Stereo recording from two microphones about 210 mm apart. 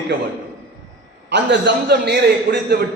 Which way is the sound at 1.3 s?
55° right (ahead or behind).